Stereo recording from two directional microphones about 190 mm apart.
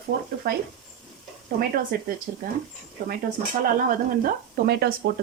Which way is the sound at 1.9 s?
50° right (ahead or behind).